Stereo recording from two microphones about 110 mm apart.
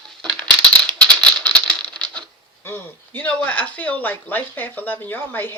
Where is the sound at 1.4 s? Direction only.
10° left (ahead or behind).